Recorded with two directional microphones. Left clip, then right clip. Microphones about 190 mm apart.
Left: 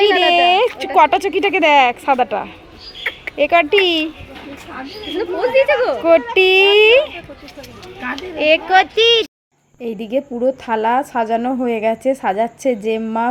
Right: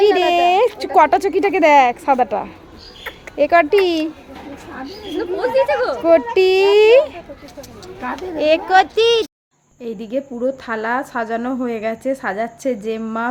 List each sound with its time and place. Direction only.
0.2 s a sound: 5° right (ahead or behind)
0.9 s speech: 10° right (ahead or behind)
3.0 s a sound: 40° left (ahead or behind)
3.7 s speech: 45° right (ahead or behind)
5.1 s speech: 30° left (ahead or behind)
6.0 s speech: centre (ahead or behind)
8.4 s speech: centre (ahead or behind)
9.8 s a woman's voice: 15° left (ahead or behind)